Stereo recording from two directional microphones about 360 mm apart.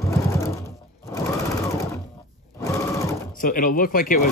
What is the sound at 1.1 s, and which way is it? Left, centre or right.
Sewing machine, centre.